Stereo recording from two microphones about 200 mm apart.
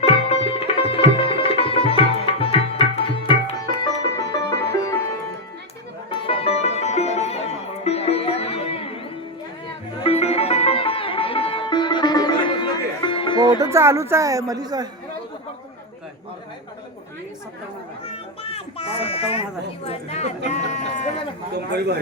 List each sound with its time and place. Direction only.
0.0 s sitar: 30° left (ahead or behind)
4.3 s music: 15° left (ahead or behind)
6.2 s music: 30° left (ahead or behind)
10.0 s music: 30° left (ahead or behind)
13.6 s speech: 15° right (ahead or behind)
18.0 s children playing: 30° left (ahead or behind)
21.5 s speech: 55° right (ahead or behind)